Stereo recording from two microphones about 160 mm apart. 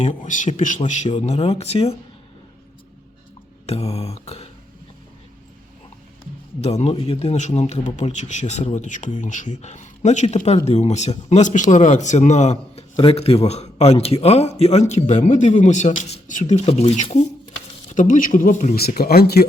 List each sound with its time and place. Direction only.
0.3 s a man's voice: 50° left (ahead or behind)
3.7 s a sound: 40° left (ahead or behind)
6.6 s a man's voice: 40° left (ahead or behind); by 19.5 s 80° left